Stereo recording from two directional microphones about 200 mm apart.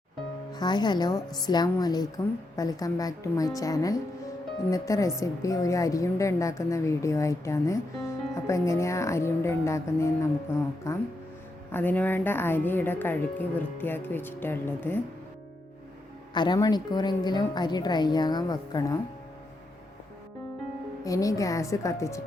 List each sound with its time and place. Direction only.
0.5 s a woman's voice: 20° left (ahead or behind)
16.3 s a woman's voice: 20° left (ahead or behind)
21.0 s a woman's voice: 15° left (ahead or behind)